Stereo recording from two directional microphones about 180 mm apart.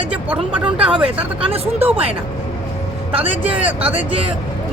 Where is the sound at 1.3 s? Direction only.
30° right (ahead or behind).